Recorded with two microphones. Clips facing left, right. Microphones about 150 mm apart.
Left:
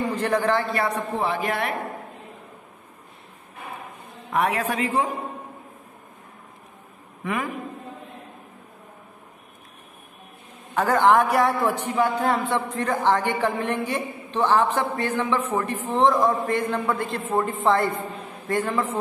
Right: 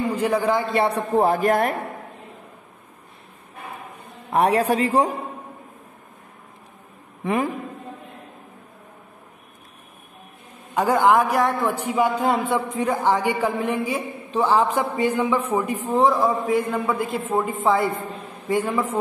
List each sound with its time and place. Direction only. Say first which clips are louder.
0.1 s a man's voice: right 1 dB; 10° right (ahead or behind)
0.7 s a man's voice: right 4 dB; 30° right (ahead or behind)
1.1 s speech: right 7 dB; 45° right (ahead or behind)
4.3 s a woman's voice: right 5 dB; 35° right (ahead or behind)
7.2 s a woman's voice: right 5 dB; 35° right (ahead or behind)
10.7 s a man's voice: right 1 dB; 10° right (ahead or behind)
11.8 s a man's voice: right 2 dB; 10° right (ahead or behind)